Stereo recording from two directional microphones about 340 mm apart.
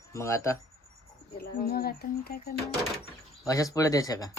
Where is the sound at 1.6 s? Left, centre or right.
Left.